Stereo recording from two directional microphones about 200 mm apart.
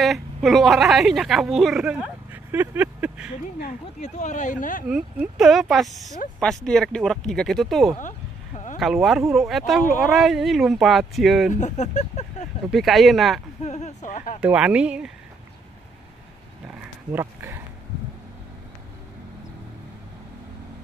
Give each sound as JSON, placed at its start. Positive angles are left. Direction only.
{"t": 0.0, "sound": "a woman's voice", "side_deg": 0}
{"t": 4.0, "sound": "speech", "side_deg": 35}
{"t": 4.8, "sound": "speech", "side_deg": -5}
{"t": 11.5, "sound": "speech", "side_deg": 35}
{"t": 12.7, "sound": "speech", "side_deg": 0}
{"t": 13.7, "sound": "speech", "side_deg": 35}
{"t": 14.4, "sound": "speech", "side_deg": -5}
{"t": 17.1, "sound": "speech", "side_deg": -10}